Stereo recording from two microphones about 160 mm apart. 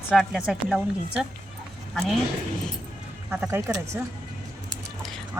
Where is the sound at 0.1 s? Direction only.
5° right (ahead or behind).